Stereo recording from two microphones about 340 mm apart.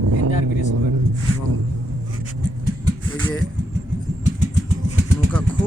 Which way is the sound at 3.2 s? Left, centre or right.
Centre.